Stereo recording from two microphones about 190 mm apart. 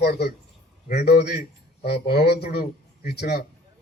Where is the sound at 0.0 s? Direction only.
55° left (ahead or behind).